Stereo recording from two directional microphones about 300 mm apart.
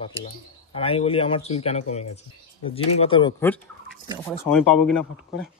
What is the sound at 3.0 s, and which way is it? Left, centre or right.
Speech, centre.